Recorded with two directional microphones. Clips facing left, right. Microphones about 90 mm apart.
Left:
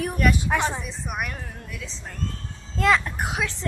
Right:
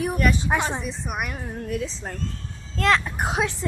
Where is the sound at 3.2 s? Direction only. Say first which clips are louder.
Right 4 dB; 30° right (ahead or behind).